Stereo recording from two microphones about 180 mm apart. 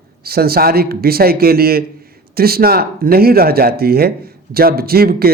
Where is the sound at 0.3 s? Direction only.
60° right (ahead or behind).